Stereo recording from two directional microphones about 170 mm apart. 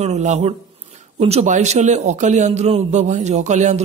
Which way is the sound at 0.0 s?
40° right (ahead or behind).